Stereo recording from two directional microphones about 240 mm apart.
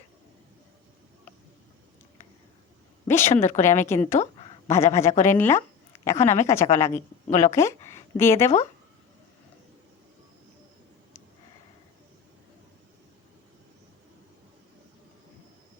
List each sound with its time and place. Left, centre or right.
3.1 s a woman's voice: centre
7.3 s speech: left
7.5 s speech: centre